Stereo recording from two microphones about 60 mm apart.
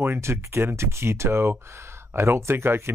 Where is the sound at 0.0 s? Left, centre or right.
Right.